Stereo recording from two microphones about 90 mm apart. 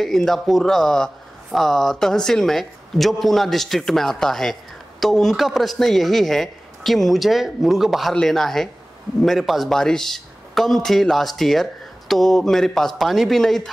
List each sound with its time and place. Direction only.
0.0 s speech: 5° left (ahead or behind)